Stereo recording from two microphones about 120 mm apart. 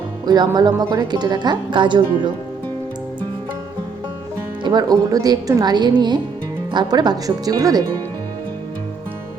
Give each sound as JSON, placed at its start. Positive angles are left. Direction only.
{"t": 0.3, "sound": "speech", "side_deg": -35}
{"t": 4.6, "sound": "speech", "side_deg": -35}